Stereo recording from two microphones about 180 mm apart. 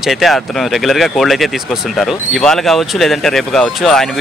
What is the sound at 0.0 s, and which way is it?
Speech, centre (ahead or behind).